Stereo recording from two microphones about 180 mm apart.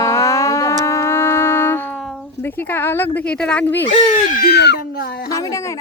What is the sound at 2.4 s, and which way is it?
A woman's voice, 10° left (ahead or behind).